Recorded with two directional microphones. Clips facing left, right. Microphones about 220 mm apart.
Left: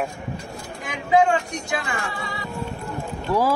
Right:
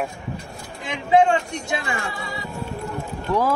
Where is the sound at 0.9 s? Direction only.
25° right (ahead or behind).